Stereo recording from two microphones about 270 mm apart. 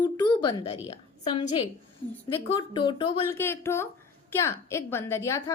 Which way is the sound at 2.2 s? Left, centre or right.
Centre.